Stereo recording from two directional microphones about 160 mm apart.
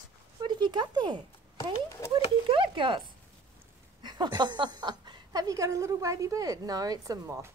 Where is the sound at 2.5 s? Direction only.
30° right (ahead or behind).